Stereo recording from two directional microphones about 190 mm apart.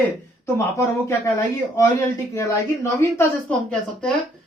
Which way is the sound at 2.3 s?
15° left (ahead or behind).